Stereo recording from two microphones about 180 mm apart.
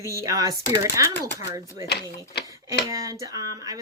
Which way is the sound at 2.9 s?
20° right (ahead or behind).